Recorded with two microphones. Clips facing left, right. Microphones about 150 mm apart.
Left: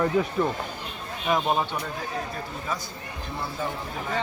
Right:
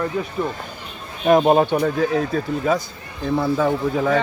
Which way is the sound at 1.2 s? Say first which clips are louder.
Right 10 dB; 60° right (ahead or behind).